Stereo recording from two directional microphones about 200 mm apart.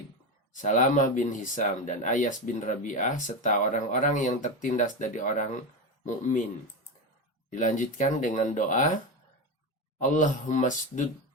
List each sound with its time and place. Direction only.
0.5 s speech: 40° left (ahead or behind)
7.5 s speech: 40° left (ahead or behind)
10.0 s speech: 40° left (ahead or behind)